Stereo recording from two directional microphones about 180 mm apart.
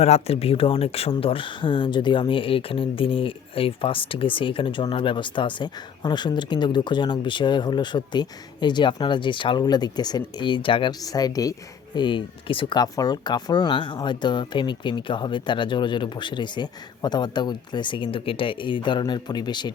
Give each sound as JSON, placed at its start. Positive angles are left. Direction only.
{"t": 0.0, "sound": "speech", "side_deg": 35}